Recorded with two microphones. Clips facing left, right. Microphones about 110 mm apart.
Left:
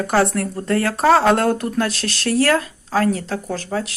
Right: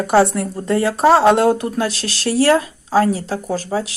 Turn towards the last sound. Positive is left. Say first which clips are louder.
# right 3 dB
turn(degrees=-5)  # may be behind; listen again after turning